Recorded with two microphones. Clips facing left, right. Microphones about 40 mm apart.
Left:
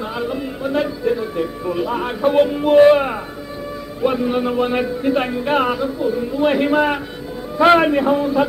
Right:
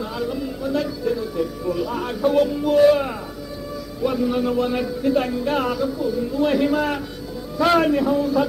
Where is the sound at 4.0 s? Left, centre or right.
Left.